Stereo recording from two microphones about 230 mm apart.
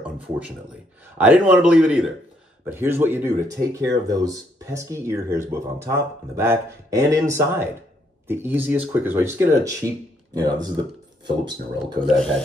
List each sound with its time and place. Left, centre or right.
1.1 s speech: centre